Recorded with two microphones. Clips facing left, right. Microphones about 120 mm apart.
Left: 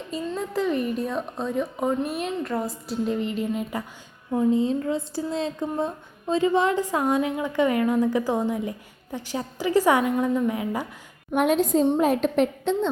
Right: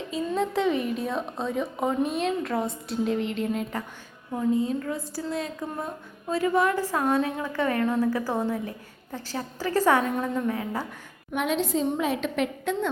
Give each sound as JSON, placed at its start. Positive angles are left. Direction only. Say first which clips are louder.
{"t": 0.3, "sound": "a woman's voice", "louder": "right 1 dB", "side_deg": 0}
{"t": 4.3, "sound": "a woman's voice", "louder": "left 3 dB", "side_deg": 25}
{"t": 11.3, "sound": "a woman's voice", "louder": "left 5 dB", "side_deg": 45}
{"t": 12.7, "sound": "a woman's voice", "louder": "left 4 dB", "side_deg": 25}